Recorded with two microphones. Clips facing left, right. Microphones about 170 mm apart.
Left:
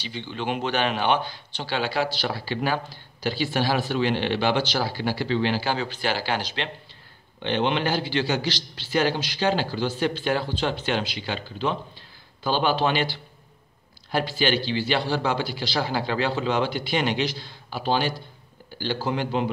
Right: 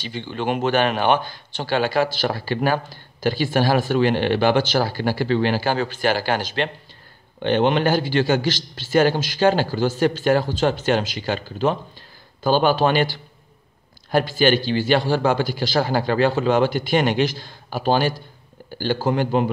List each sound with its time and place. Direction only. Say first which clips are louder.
0.0 s speech: right 5 dB; 50° right (ahead or behind)